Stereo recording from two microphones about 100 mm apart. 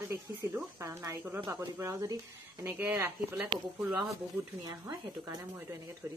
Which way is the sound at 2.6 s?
15° right (ahead or behind).